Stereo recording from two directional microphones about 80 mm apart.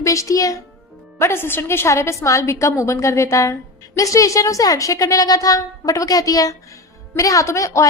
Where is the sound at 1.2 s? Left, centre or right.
Left.